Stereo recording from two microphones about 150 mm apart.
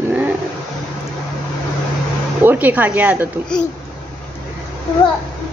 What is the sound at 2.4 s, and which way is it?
Speech, 10° right (ahead or behind).